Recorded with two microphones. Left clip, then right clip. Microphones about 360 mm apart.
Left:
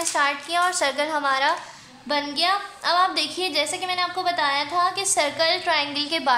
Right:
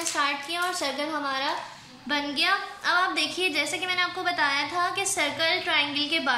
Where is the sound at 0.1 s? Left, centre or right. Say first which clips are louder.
Left 5 dB; centre.